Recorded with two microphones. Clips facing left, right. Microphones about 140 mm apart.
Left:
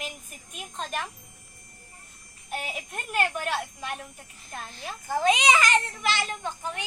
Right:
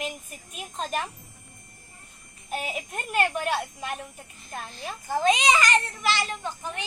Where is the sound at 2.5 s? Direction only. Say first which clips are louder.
Right 3 dB; 5° right (ahead or behind).